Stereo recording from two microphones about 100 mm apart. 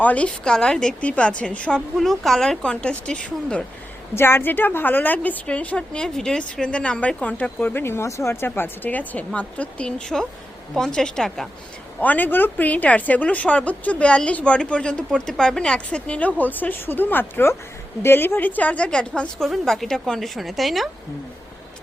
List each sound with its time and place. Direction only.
0.0 s a woman's voice: 15° left (ahead or behind)
4.1 s a woman's voice: 25° left (ahead or behind); by 11.4 s 5° left (ahead or behind)
11.9 s a woman's voice: 15° left (ahead or behind); by 20.9 s centre (ahead or behind)